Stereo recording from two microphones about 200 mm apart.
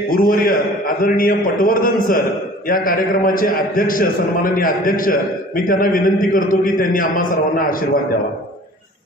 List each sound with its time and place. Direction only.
0.1 s a man's voice: 45° left (ahead or behind)